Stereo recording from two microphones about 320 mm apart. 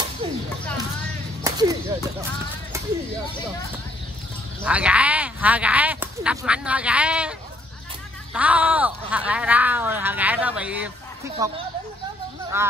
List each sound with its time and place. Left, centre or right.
0.2 s a sound: centre
1.4 s whip: centre
4.6 s speech: centre